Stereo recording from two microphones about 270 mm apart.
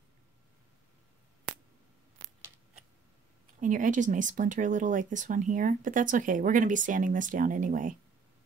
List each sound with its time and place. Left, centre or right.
2.2 s scissors: centre
3.6 s speech: right